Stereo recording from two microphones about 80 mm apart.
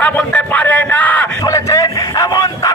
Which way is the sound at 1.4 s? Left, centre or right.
Left.